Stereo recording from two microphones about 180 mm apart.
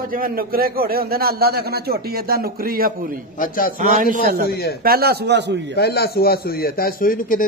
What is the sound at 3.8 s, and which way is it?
A man's voice, 45° right (ahead or behind).